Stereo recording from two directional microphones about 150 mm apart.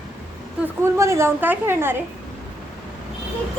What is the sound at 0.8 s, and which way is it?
A woman's voice, 20° right (ahead or behind).